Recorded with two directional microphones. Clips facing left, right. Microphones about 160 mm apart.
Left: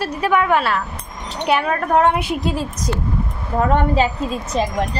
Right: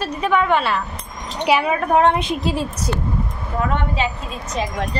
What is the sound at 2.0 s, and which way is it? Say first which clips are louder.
Speech: even; 10° left (ahead or behind).